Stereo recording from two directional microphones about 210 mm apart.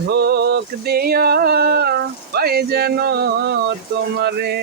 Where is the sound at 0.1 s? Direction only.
50° right (ahead or behind).